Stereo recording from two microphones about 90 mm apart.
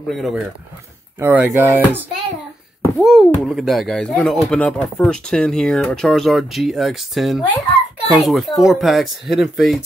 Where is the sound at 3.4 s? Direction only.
Centre (ahead or behind).